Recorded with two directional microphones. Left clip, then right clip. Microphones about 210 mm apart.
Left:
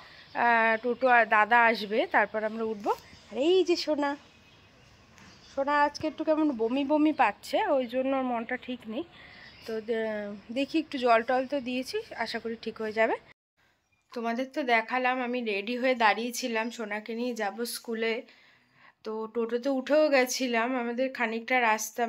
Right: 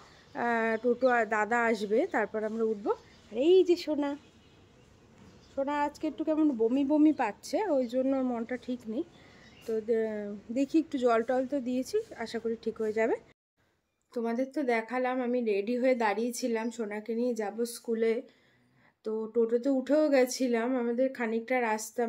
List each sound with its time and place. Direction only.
0.3 s a woman's voice: 5° right (ahead or behind)
2.8 s speech: 20° left (ahead or behind)
5.6 s a woman's voice: 15° left (ahead or behind); by 18.2 s 10° right (ahead or behind)
19.3 s a woman's voice: 5° right (ahead or behind)